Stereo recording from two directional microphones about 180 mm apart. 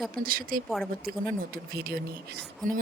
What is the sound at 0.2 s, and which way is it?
Speech, 50° right (ahead or behind).